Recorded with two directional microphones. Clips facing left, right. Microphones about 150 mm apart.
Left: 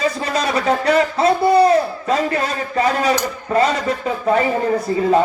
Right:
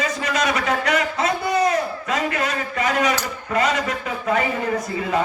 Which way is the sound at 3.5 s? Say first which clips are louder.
Left 4 dB; 35° left (ahead or behind).